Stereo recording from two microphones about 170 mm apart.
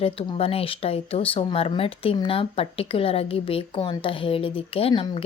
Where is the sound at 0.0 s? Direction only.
35° left (ahead or behind).